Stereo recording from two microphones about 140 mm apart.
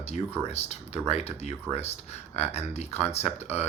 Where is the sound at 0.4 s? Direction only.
45° left (ahead or behind).